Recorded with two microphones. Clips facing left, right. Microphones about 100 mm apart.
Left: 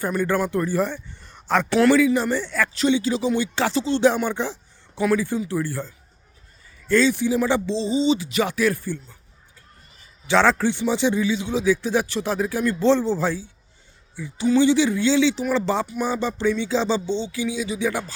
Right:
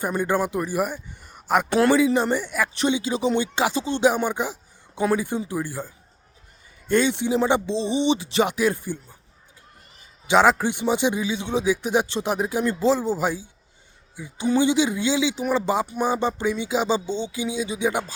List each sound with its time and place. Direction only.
0.0 s speech: 20° right (ahead or behind)
1.8 s speech: 20° right (ahead or behind)
10.2 s speech: 15° right (ahead or behind)
12.8 s speech: 10° right (ahead or behind)